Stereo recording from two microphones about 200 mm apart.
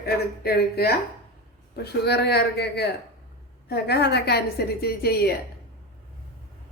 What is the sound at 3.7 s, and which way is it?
A woman's voice, 55° left (ahead or behind).